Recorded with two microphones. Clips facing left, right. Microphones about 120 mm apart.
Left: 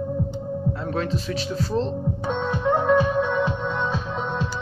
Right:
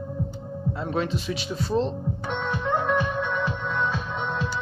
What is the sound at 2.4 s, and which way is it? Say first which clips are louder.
Music: left 4 dB; 15° left (ahead or behind).